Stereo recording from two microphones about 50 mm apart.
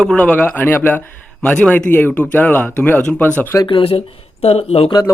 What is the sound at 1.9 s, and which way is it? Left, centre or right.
Speech, left.